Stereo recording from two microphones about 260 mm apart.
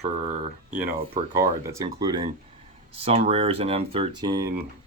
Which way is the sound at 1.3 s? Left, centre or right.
Centre.